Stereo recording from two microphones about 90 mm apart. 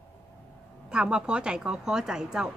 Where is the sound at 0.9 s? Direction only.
10° right (ahead or behind).